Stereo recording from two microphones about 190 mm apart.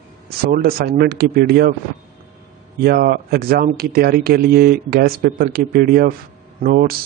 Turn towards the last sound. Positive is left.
turn(degrees=-50)  # may be behind; listen again after turning